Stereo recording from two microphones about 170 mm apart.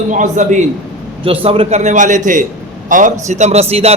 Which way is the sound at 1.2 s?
35° right (ahead or behind).